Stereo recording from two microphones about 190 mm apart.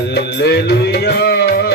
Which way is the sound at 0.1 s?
60° left (ahead or behind).